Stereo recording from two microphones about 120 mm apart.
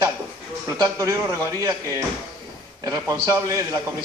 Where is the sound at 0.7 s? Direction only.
30° right (ahead or behind).